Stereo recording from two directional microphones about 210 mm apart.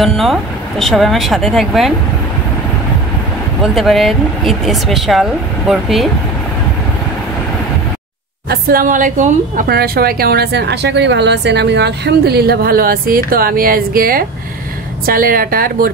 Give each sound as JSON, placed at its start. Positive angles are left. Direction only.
{"t": 0.0, "sound": "speech", "side_deg": 0}
{"t": 3.6, "sound": "speech", "side_deg": 0}
{"t": 8.5, "sound": "a woman's voice", "side_deg": -45}